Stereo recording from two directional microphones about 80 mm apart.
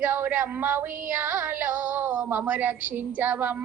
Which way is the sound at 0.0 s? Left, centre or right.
Right.